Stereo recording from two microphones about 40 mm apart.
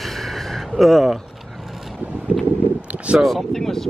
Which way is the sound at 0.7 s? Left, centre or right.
Centre.